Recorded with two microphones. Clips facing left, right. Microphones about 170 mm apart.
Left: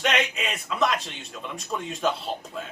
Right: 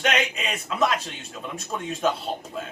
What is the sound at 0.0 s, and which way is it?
A man's voice, centre (ahead or behind).